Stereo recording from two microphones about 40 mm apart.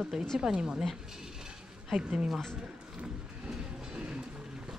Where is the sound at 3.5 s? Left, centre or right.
Right.